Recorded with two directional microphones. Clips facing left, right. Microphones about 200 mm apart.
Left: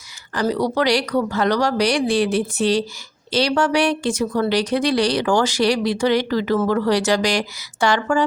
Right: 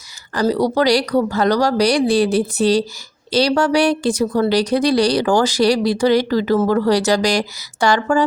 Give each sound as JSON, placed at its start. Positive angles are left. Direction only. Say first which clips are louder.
{"t": 0.3, "sound": "speech", "louder": "right 3 dB", "side_deg": -35}